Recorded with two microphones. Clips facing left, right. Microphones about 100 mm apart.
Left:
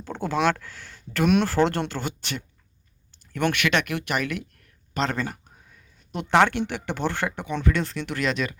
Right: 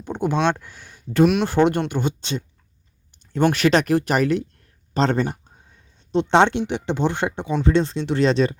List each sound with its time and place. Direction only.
0.0 s speech: 20° right (ahead or behind)
3.1 s a sound: 20° right (ahead or behind)
3.5 s speech: 35° right (ahead or behind)